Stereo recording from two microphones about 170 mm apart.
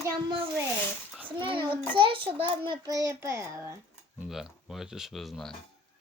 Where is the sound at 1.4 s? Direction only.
30° right (ahead or behind).